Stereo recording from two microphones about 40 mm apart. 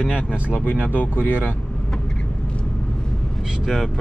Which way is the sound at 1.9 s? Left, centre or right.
Centre.